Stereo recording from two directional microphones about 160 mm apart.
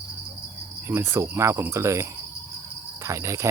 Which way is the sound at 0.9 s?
15° right (ahead or behind).